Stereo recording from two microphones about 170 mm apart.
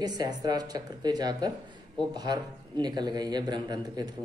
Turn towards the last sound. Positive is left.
turn(degrees=-25)  # may be behind; listen again after turning